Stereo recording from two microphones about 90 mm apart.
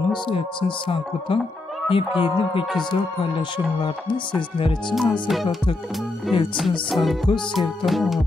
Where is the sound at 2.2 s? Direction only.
70° left (ahead or behind).